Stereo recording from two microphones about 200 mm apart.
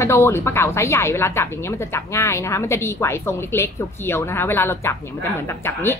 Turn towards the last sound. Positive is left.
turn(degrees=10)  # may be behind; listen again after turning